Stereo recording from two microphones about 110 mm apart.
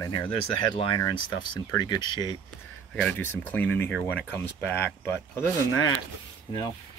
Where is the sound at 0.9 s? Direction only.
40° left (ahead or behind).